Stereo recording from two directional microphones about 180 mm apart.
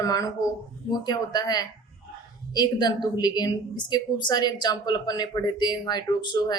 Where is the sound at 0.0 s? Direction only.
20° left (ahead or behind).